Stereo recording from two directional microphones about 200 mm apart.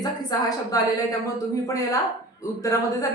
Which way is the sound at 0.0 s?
20° left (ahead or behind).